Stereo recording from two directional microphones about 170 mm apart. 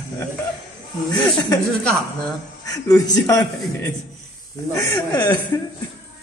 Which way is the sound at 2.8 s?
20° left (ahead or behind).